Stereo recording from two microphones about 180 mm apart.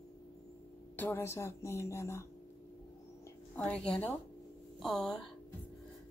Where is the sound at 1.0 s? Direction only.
10° left (ahead or behind).